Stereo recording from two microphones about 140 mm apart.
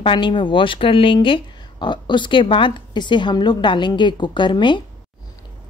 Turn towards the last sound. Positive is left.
turn(degrees=35)  # may be behind; listen again after turning